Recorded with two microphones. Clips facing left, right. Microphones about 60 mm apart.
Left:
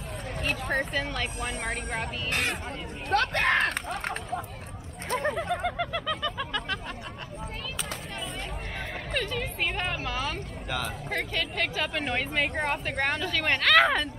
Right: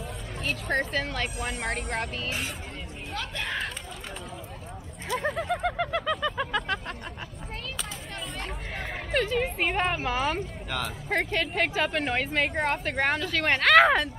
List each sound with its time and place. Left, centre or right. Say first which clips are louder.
0.4 s speech: right 1 dB; centre
3.1 s a sound: left 10 dB; left
5.2 s speech: right 1 dB; centre
9.1 s speech: right 6 dB; centre
10.7 s speech: right 1 dB; centre